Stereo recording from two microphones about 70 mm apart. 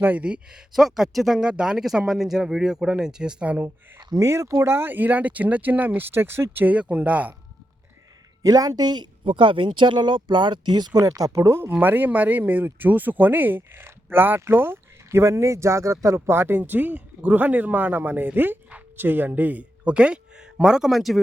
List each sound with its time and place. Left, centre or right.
0.0 s speech: right
0.8 s speech: centre
4.1 s speech: right
6.7 s speech: centre
8.4 s speech: right
10.9 s speech: right
11.8 s speech: right
16.6 s speech: right; by 21.2 s centre